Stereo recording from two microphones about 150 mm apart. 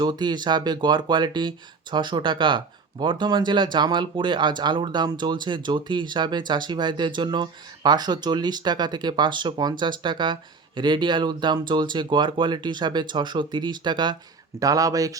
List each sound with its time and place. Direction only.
0.0 s speech: 30° right (ahead or behind)